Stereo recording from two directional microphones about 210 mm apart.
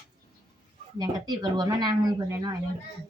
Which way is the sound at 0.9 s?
20° right (ahead or behind).